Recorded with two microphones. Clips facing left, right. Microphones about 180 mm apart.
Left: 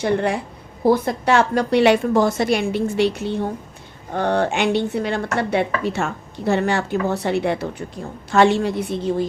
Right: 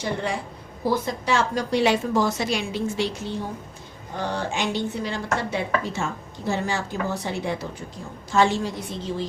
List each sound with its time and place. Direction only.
0.0 s speech: 60° left (ahead or behind)